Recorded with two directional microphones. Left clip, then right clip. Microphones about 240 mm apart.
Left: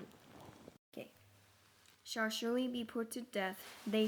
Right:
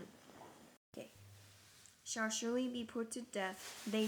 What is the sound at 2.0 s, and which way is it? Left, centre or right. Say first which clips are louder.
Speech: left 2 dB; centre.